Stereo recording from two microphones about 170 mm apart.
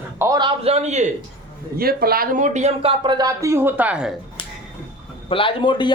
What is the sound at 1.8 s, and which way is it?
Speech, 60° right (ahead or behind).